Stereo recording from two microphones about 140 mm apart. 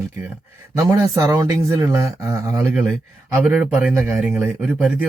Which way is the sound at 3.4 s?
5° right (ahead or behind).